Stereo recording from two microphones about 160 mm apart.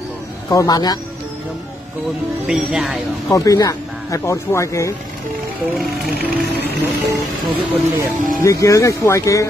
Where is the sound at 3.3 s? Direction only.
20° left (ahead or behind).